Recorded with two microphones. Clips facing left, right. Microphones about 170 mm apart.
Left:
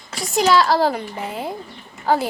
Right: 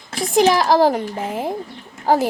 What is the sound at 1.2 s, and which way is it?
Speech, 45° right (ahead or behind).